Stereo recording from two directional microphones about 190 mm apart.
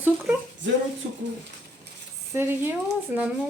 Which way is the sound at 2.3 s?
10° right (ahead or behind).